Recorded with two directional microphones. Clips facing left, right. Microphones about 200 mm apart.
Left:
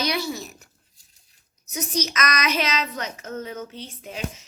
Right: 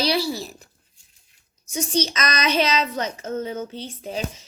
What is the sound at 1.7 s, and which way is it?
A woman's voice, 30° right (ahead or behind).